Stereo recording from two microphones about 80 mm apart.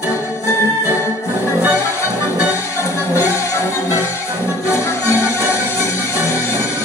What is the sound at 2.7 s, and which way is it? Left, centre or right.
Music, left.